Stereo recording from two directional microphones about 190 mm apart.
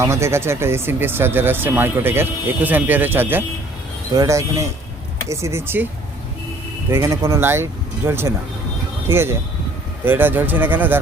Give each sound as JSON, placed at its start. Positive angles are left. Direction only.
{"t": 0.0, "sound": "speech", "side_deg": -15}
{"t": 6.9, "sound": "speech", "side_deg": -15}